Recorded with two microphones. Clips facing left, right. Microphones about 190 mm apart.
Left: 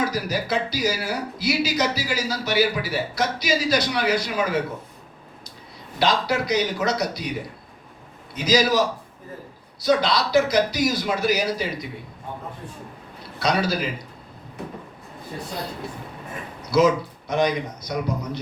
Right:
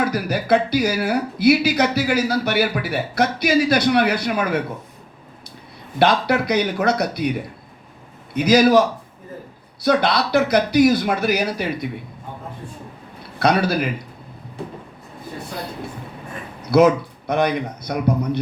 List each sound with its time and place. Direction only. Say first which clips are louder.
0.0 s speech: right 3 dB; 60° right (ahead or behind)
6.0 s speech: right 5 dB; 60° right (ahead or behind)
8.3 s speech: right 6 dB; 60° right (ahead or behind)
9.8 s speech: right 2 dB; 60° right (ahead or behind)
13.4 s speech: right 5 dB; 60° right (ahead or behind)
16.6 s speech: right 4 dB; 60° right (ahead or behind)